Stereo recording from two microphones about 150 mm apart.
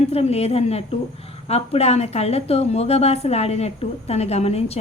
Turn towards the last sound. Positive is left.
turn(degrees=45)  # may be behind; listen again after turning